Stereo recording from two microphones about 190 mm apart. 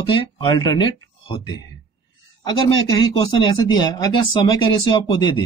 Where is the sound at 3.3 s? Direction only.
25° left (ahead or behind).